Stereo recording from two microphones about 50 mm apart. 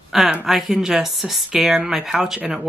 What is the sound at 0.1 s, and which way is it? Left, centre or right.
Speech, centre.